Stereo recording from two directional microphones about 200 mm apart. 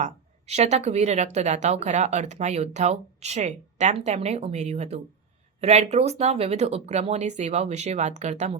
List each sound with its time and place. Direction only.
0.0 s speech: 35° right (ahead or behind)